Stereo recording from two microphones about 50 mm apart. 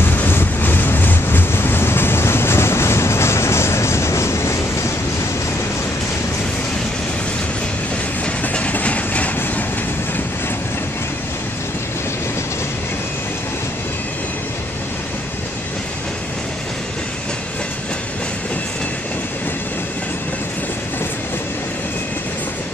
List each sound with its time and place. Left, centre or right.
0.0 s vehicle: left
8.4 s train: left